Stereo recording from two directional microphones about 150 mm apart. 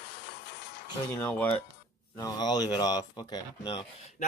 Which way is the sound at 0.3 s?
90° left.